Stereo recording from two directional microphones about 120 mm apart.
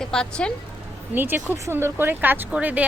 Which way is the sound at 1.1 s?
15° right (ahead or behind).